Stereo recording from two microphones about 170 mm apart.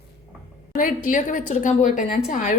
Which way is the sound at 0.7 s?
50° left (ahead or behind).